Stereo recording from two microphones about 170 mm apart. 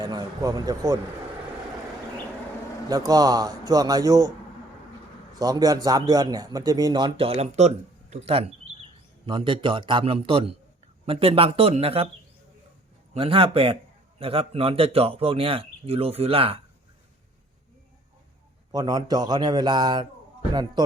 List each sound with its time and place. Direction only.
0.0 s speech: 25° right (ahead or behind)
2.9 s a man's voice: 20° right (ahead or behind)
5.4 s a man's voice: 20° right (ahead or behind)
13.1 s speech: 30° right (ahead or behind)
18.7 s a man's voice: 25° right (ahead or behind)